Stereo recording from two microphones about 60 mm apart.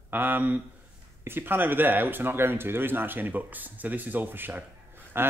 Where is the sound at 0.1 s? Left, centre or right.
Right.